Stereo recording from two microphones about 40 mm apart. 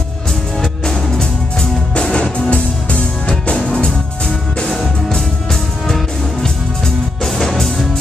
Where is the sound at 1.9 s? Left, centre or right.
Left.